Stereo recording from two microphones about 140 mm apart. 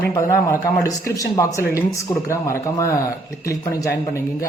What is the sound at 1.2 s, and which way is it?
A man's voice, 25° left (ahead or behind).